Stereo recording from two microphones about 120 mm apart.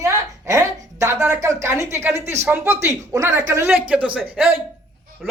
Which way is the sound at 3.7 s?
10° right (ahead or behind).